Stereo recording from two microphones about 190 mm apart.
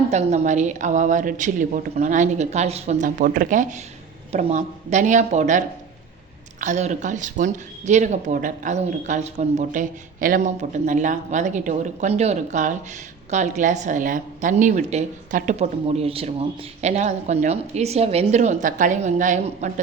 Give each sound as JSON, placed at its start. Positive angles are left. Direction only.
{"t": 0.1, "sound": "speech", "side_deg": -35}